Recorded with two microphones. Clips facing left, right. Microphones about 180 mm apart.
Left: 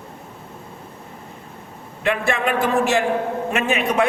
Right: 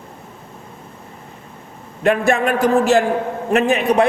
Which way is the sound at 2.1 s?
45° right (ahead or behind).